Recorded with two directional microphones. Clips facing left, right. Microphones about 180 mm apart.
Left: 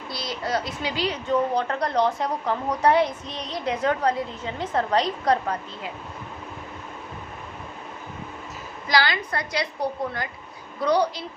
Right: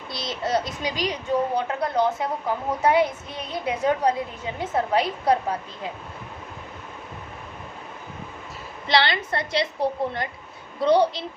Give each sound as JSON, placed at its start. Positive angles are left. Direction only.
{"t": 0.1, "sound": "a child's voice", "side_deg": -20}
{"t": 8.9, "sound": "a woman's voice", "side_deg": -25}